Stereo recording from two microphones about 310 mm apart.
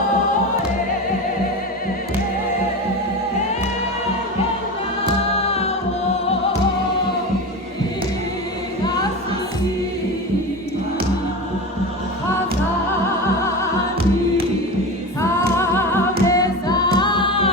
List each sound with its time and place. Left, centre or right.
5.4 s music: centre
15.2 s music: centre
16.2 s singing: centre